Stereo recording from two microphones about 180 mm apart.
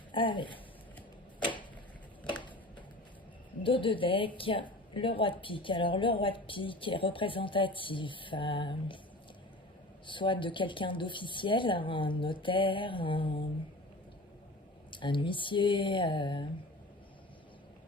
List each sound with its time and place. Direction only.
0.1 s a woman's voice: 25° left (ahead or behind)
3.6 s a woman's voice: 30° left (ahead or behind)
10.1 s a woman's voice: 25° left (ahead or behind)
14.8 s a woman's voice: 25° left (ahead or behind)